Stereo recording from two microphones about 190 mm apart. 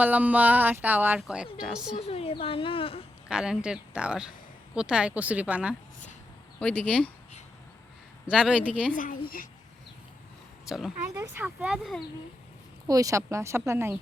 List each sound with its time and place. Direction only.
0.0 s speech: 10° right (ahead or behind)
2.0 s a woman's voice: 30° left (ahead or behind)
3.2 s speech: 5° right (ahead or behind)
6.6 s speech: 5° left (ahead or behind)
8.3 s speech: centre (ahead or behind)
9.0 s a woman's voice: 45° left (ahead or behind)
10.7 s speech: centre (ahead or behind)
11.1 s speech: 15° right (ahead or behind)
12.9 s speech: 15° right (ahead or behind)